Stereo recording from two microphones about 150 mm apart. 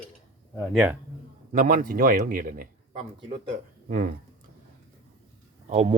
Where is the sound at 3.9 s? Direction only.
60° right (ahead or behind).